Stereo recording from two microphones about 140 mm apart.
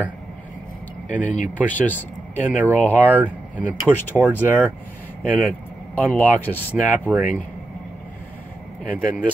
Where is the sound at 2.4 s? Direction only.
15° right (ahead or behind).